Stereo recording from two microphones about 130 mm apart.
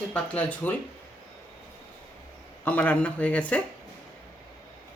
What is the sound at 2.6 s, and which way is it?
Speech, 10° left (ahead or behind).